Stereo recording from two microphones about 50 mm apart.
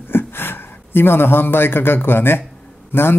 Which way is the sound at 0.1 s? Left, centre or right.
Left.